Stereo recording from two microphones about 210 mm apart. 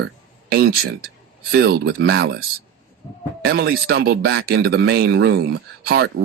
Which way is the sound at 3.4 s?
50° right (ahead or behind).